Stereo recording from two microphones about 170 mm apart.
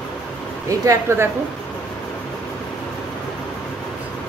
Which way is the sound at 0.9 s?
15° right (ahead or behind).